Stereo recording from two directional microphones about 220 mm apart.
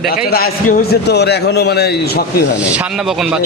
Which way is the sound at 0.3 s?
45° left (ahead or behind).